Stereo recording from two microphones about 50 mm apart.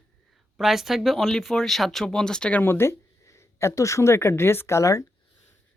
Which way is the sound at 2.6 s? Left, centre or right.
Left.